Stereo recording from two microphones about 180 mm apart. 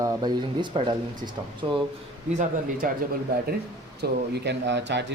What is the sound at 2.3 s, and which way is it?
Speech, 50° right (ahead or behind).